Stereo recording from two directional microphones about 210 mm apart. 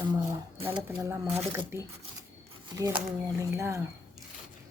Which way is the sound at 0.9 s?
10° right (ahead or behind).